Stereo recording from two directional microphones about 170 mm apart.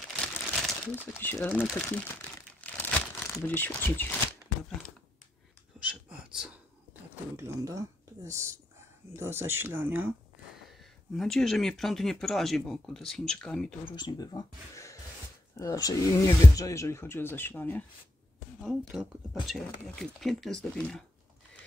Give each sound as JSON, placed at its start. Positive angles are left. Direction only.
{"t": 0.1, "sound": "crumpling", "side_deg": 5}
{"t": 1.7, "sound": "speech", "side_deg": 5}
{"t": 2.6, "sound": "crumpling", "side_deg": 10}
{"t": 3.4, "sound": "speech", "side_deg": 10}
{"t": 5.8, "sound": "a sound", "side_deg": -5}
{"t": 7.3, "sound": "speech", "side_deg": -20}
{"t": 11.1, "sound": "speech", "side_deg": 5}
{"t": 13.9, "sound": "speech", "side_deg": 25}
{"t": 18.6, "sound": "speech", "side_deg": 0}